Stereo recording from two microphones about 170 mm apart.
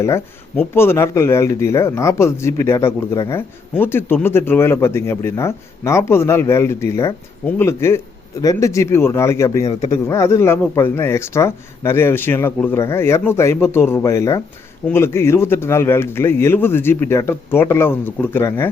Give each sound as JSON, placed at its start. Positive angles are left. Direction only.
{"t": 0.0, "sound": "speech", "side_deg": 15}